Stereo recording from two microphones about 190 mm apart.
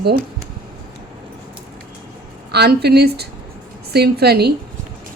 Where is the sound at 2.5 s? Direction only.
60° right (ahead or behind).